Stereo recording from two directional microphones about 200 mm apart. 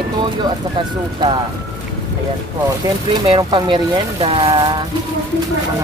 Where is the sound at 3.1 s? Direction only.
20° right (ahead or behind).